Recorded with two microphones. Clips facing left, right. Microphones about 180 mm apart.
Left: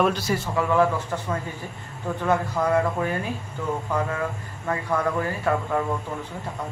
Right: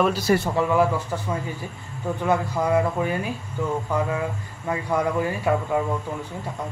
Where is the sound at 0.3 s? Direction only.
55° right (ahead or behind).